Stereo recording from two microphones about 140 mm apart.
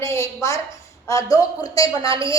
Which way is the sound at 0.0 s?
20° left (ahead or behind).